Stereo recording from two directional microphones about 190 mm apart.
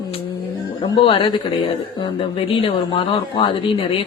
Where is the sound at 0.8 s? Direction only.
25° left (ahead or behind).